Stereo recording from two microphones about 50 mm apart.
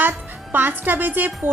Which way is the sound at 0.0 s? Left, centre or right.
Right.